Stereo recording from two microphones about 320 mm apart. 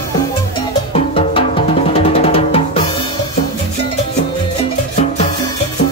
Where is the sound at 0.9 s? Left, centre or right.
Centre.